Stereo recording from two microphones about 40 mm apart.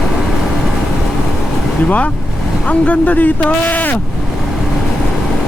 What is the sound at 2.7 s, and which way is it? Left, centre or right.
Speech, left.